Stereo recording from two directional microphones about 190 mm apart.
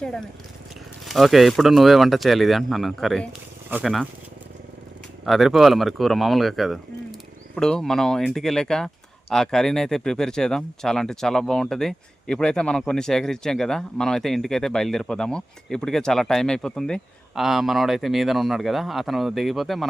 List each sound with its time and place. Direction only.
0.0 s speech: 5° left (ahead or behind)
5.2 s speech: centre (ahead or behind)